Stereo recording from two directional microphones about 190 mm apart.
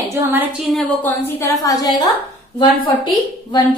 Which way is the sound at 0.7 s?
Centre (ahead or behind).